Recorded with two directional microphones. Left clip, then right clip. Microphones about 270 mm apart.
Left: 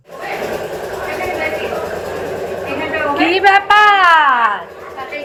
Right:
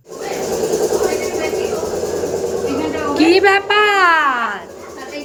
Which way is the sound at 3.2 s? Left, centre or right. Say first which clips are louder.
Even; centre.